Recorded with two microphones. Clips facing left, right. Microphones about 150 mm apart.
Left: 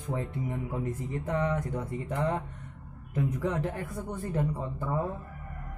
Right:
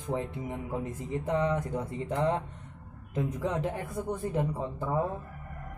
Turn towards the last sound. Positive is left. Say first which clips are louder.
# even
turn(degrees=-20)  # may be behind; listen again after turning